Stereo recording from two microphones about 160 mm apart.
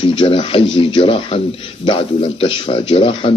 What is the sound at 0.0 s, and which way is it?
Speech, 35° left (ahead or behind).